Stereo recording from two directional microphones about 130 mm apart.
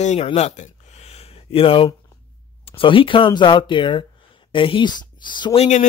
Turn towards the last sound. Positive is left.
turn(degrees=65)  # may be behind; listen again after turning